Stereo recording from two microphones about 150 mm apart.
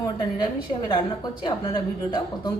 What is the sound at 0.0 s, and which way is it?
Speech, 25° left (ahead or behind).